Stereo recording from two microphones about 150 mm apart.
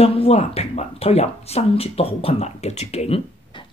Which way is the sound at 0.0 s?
40° left (ahead or behind).